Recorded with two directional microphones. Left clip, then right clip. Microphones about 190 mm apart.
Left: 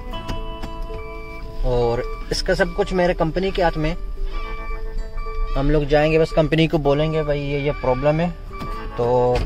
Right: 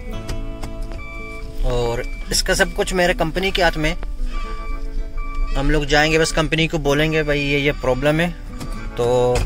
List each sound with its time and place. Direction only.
1.6 s speech: 15° left (ahead or behind)
5.5 s speech: 10° left (ahead or behind)
6.5 s speech: 25° left (ahead or behind)
6.8 s speech: 5° left (ahead or behind)